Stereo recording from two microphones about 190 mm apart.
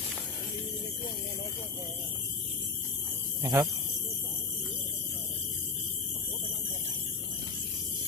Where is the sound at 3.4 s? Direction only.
15° right (ahead or behind).